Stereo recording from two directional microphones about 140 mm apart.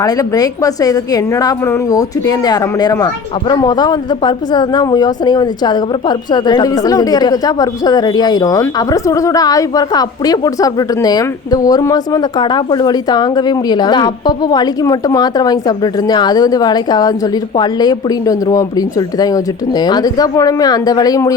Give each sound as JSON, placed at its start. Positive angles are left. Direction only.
{"t": 0.0, "sound": "a woman's voice", "side_deg": 25}